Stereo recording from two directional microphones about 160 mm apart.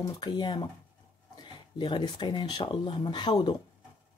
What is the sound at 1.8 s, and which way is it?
Speech, 30° left (ahead or behind).